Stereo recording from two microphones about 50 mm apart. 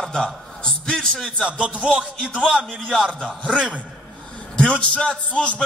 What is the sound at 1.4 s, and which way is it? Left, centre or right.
Speech, centre.